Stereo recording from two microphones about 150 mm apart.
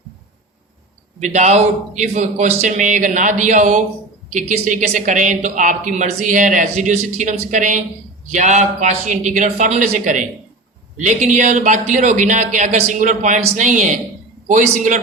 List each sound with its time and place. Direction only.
1.2 s speech: 50° right (ahead or behind)